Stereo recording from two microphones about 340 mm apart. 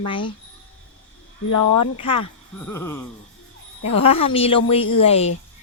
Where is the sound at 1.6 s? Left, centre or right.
Left.